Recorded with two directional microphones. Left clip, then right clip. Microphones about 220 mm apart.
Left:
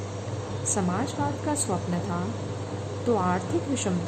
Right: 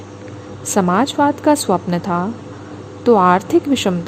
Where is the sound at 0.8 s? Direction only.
40° right (ahead or behind).